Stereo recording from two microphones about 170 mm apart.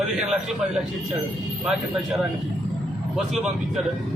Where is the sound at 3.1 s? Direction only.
Centre (ahead or behind).